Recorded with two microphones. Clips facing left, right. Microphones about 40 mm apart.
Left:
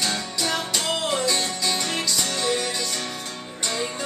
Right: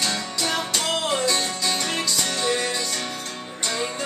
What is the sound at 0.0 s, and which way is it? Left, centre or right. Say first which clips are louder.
Music: even; centre.